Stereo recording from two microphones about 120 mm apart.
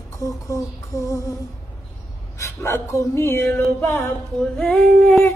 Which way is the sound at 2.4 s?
20° left (ahead or behind).